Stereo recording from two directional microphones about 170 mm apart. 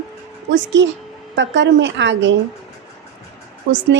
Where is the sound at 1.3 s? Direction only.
90° right.